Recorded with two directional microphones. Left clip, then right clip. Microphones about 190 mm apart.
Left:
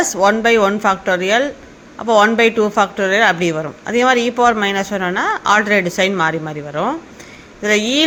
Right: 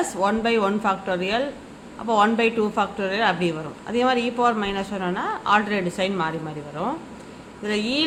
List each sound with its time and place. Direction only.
0.0 s speech: 35° left (ahead or behind)